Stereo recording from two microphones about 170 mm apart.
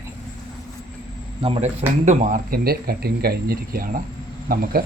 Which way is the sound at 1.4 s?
35° right (ahead or behind).